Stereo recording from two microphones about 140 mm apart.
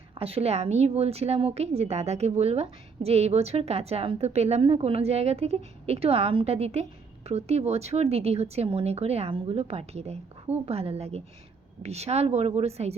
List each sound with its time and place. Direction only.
0.1 s a woman's voice: 45° right (ahead or behind)